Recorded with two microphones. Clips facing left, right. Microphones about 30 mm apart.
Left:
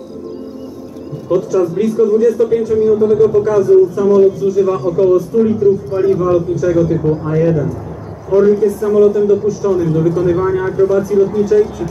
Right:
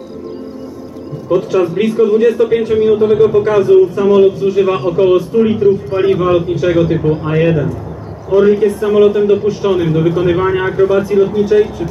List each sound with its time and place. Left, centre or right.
1.5 s a man's voice: right
4.3 s a man's voice: right
5.0 s speech: right
5.6 s a man's voice: right
5.9 s speech: right
6.4 s a man's voice: right
7.3 s a man's voice: right
8.4 s a man's voice: right
9.9 s a man's voice: right
10.2 s a man's voice: right